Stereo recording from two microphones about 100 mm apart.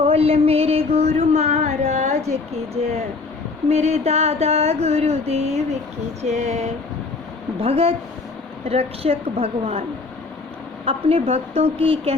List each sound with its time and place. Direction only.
0.0 s a sound: 75° right (ahead or behind); by 1.9 s 90° right
2.3 s mantra: 90° right
7.6 s a woman's voice: 85° right
10.8 s a woman's voice: 80° right